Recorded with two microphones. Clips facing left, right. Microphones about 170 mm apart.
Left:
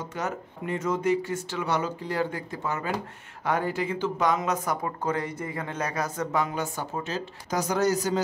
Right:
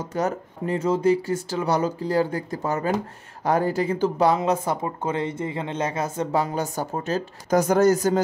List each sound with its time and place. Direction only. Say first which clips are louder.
0.1 s speech: right 10 dB; 35° right (ahead or behind)